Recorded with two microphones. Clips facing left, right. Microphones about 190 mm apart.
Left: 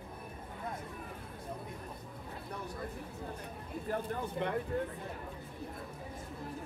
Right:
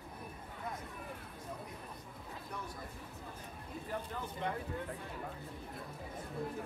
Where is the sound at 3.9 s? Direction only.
55° left (ahead or behind).